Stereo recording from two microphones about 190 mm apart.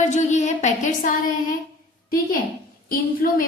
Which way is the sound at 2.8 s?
50° left (ahead or behind).